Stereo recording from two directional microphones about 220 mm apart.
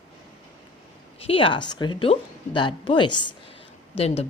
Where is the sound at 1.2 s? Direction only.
25° left (ahead or behind).